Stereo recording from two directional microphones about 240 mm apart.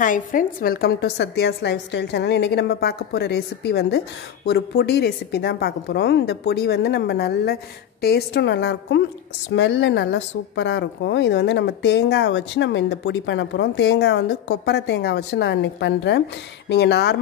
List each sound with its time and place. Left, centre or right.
0.0 s a woman's voice: left